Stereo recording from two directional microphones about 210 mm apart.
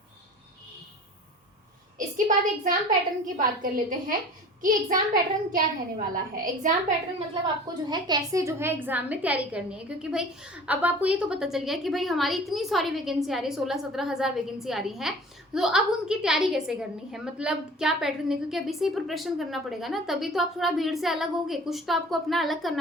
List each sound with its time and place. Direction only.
2.0 s a child's voice: 40° right (ahead or behind)
7.4 s a woman's voice: 20° right (ahead or behind); by 22.8 s centre (ahead or behind)